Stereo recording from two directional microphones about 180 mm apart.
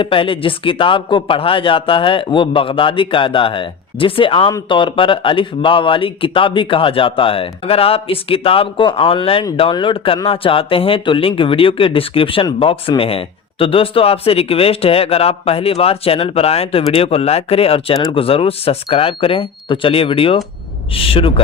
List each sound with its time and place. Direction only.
0.0 s speech: 30° left (ahead or behind)